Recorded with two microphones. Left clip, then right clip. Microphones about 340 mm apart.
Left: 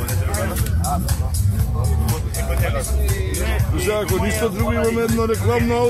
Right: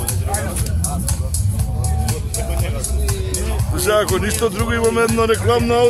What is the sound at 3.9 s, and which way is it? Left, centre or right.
Speech, right.